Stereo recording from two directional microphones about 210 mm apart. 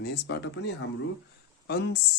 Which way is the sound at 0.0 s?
50° left (ahead or behind).